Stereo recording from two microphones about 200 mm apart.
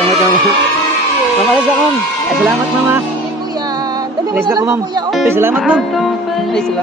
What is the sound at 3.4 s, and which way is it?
Music, 20° right (ahead or behind).